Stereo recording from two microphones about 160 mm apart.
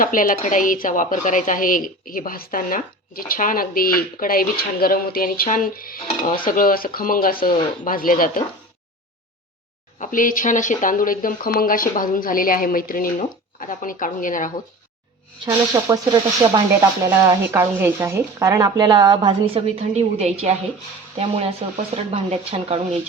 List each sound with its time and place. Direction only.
0.0 s speech: 60° left (ahead or behind)
10.0 s speech: 55° left (ahead or behind)
15.4 s speech: 20° right (ahead or behind)
17.1 s speech: 15° right (ahead or behind); by 22.8 s 40° right (ahead or behind)